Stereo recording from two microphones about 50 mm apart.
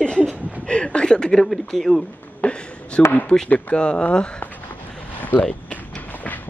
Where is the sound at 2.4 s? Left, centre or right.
Left.